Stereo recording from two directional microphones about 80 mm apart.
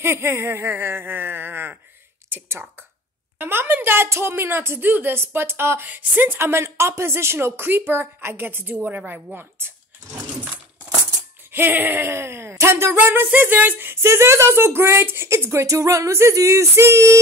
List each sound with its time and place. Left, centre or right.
0.0 s speech: right
11.5 s speech: right